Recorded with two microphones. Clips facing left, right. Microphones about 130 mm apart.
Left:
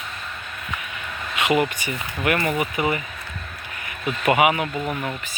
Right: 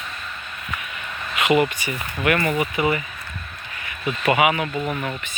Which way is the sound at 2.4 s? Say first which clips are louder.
Right 1 dB; 5° left (ahead or behind).